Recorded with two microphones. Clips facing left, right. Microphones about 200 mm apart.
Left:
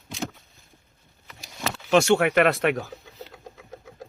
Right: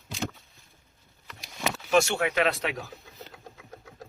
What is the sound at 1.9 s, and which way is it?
Speech, 65° left (ahead or behind).